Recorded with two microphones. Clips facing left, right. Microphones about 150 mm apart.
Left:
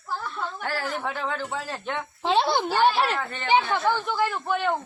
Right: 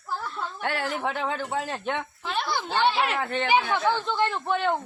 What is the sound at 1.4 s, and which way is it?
Speech, 50° right (ahead or behind).